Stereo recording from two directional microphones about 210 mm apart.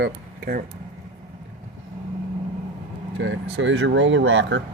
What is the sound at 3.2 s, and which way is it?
Speech, 60° right (ahead or behind).